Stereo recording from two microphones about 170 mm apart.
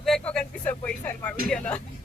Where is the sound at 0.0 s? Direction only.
5° left (ahead or behind).